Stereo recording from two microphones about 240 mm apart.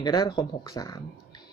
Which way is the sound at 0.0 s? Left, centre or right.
Centre.